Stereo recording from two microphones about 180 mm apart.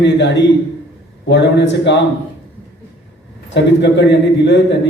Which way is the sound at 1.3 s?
75° left (ahead or behind).